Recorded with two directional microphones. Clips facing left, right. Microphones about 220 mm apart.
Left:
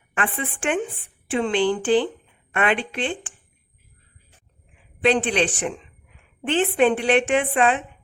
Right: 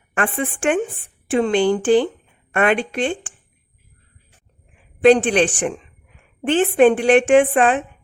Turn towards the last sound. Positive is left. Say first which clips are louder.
# right 6 dB
turn(degrees=-45)  # may be behind; listen again after turning